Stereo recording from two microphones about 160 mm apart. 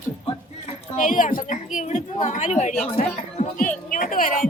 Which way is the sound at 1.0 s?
55° left (ahead or behind).